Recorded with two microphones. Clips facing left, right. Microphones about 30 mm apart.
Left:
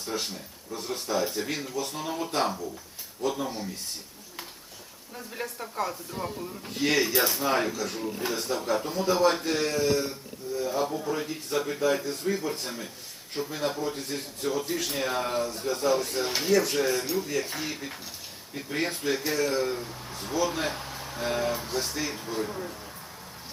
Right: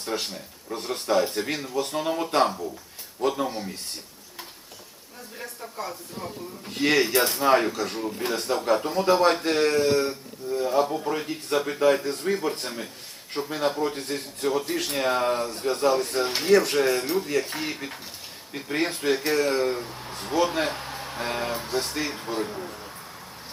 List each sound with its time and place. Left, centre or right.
0.2 s speech: right
3.4 s speech: centre
5.4 s speech: left
6.7 s speech: right
11.0 s speech: right
11.8 s speech: right
14.0 s speech: right
15.2 s speech: right
15.4 s speech: right
19.6 s speech: right
20.1 s speech: right
22.1 s speech: right
22.4 s speech: centre